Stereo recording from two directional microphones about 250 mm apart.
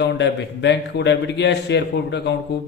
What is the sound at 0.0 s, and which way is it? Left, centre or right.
A man's voice, left.